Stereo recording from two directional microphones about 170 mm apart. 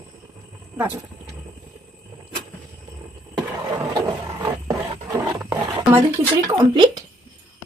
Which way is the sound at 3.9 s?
20° right (ahead or behind).